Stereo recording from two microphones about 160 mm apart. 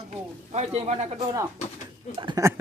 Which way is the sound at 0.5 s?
45° right (ahead or behind).